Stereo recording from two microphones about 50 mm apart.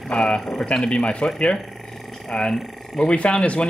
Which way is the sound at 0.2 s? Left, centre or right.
Centre.